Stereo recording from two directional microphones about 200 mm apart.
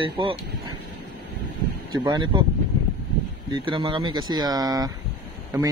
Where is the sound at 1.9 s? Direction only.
20° right (ahead or behind).